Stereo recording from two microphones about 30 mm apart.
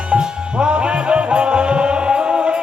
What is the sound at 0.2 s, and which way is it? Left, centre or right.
Music, right.